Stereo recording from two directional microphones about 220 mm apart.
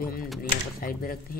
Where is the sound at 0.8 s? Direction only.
40° left (ahead or behind).